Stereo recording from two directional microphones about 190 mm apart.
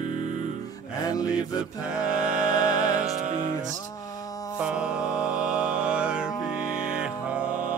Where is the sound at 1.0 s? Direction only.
20° left (ahead or behind).